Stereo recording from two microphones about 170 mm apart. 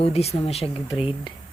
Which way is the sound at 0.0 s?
35° left (ahead or behind).